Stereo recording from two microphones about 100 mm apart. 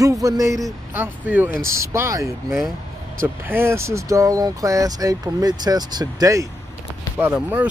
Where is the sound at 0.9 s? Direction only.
20° right (ahead or behind).